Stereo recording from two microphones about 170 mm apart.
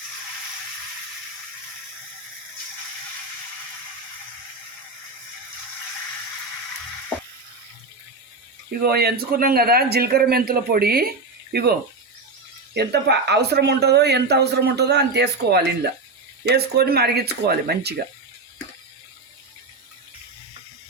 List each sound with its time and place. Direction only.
8.8 s speech: 70° right (ahead or behind)
11.5 s speech: 70° right (ahead or behind)
12.7 s speech: 75° right (ahead or behind)